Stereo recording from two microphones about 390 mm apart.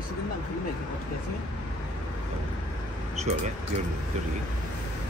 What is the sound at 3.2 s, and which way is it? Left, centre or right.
Speech, centre.